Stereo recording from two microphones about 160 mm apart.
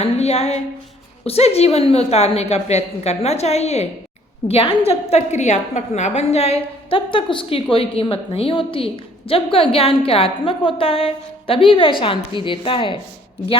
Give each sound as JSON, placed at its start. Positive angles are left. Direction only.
{"t": 0.0, "sound": "a woman's voice", "side_deg": 40}